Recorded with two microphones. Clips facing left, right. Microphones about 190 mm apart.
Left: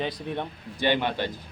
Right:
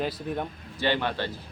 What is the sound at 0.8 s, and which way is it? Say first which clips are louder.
Speech: left 2 dB; 15° left (ahead or behind).